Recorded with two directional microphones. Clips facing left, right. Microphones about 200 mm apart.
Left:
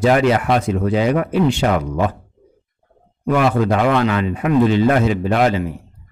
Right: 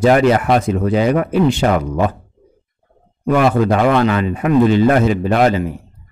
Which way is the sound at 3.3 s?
45° right (ahead or behind).